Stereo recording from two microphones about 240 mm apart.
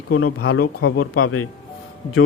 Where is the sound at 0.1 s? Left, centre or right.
Left.